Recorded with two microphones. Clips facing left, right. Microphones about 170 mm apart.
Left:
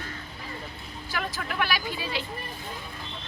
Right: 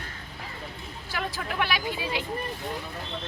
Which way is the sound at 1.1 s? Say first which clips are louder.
Even; 25° right (ahead or behind).